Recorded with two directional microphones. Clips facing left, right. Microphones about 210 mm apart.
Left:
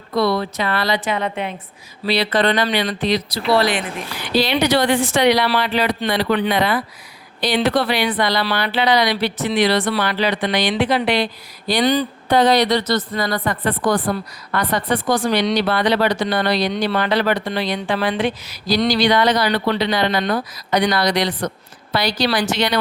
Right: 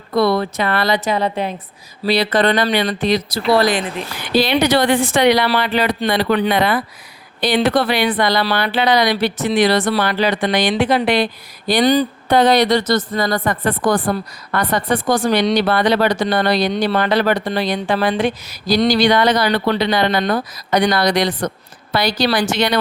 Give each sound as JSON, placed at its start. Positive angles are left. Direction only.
{"t": 0.1, "sound": "speech", "side_deg": -55}
{"t": 11.7, "sound": "a sound", "side_deg": -40}
{"t": 12.3, "sound": "speech", "side_deg": -55}